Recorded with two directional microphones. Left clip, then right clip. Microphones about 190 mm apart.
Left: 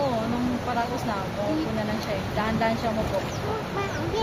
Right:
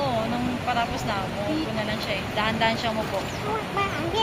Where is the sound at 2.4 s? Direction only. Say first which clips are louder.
Right 2 dB; 35° left (ahead or behind).